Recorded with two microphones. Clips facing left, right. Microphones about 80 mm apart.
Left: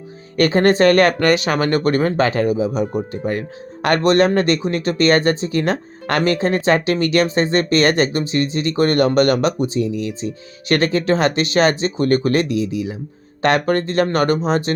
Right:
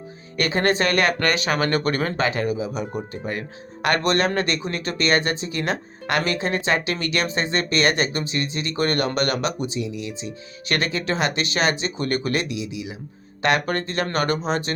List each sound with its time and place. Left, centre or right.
0.3 s speech: left